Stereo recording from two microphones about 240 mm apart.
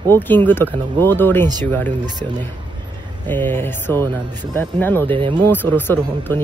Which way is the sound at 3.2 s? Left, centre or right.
Centre.